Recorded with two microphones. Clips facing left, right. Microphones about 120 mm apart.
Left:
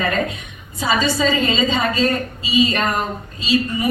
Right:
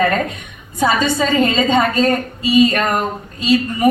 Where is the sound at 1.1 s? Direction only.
50° right (ahead or behind).